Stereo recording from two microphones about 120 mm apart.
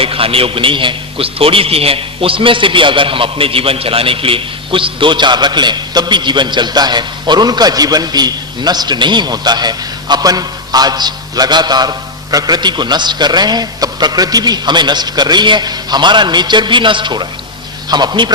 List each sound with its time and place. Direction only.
0.0 s a man's voice: 50° right (ahead or behind)